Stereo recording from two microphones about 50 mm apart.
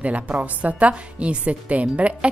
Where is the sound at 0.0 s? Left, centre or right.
Right.